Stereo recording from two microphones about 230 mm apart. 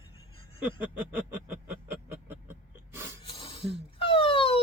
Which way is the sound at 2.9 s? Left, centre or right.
Centre.